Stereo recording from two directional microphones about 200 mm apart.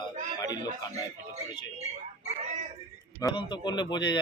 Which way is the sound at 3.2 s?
20° left (ahead or behind).